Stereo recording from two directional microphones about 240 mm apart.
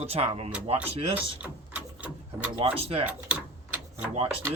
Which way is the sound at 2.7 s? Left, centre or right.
Right.